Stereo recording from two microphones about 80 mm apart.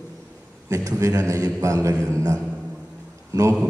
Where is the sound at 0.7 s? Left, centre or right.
Right.